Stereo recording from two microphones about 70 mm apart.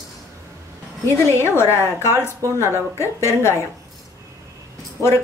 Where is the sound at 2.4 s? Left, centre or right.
Right.